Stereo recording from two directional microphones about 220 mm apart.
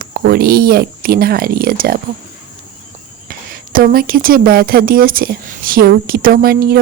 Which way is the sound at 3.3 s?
40° right (ahead or behind).